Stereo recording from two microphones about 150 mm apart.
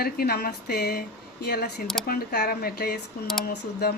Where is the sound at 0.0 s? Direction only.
90° left.